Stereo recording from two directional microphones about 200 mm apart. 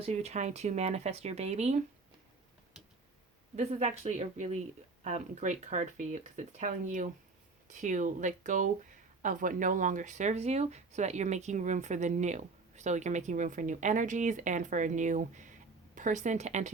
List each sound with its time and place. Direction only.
0.0 s speech: 35° right (ahead or behind)
3.5 s speech: 35° right (ahead or behind)